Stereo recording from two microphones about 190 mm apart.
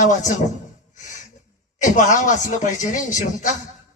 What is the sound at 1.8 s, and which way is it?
Speech, 40° left (ahead or behind).